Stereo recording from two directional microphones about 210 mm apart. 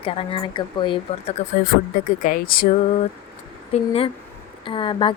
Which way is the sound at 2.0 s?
40° left (ahead or behind).